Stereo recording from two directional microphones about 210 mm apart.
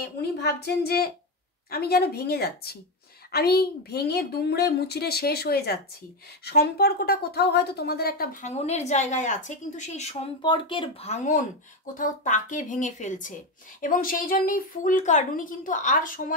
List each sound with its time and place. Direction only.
0.0 s a woman's voice: 50° left (ahead or behind)